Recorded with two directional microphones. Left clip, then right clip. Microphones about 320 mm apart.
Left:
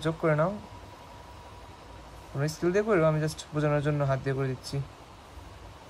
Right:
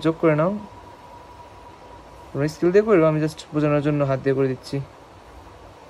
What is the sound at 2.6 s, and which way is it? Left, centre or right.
Speech, right.